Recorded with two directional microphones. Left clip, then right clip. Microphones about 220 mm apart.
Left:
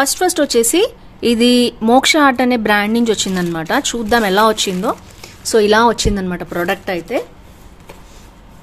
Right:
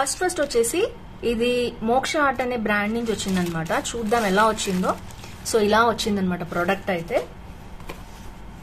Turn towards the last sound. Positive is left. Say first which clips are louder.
# left 4 dB
turn(degrees=50)  # may be behind; listen again after turning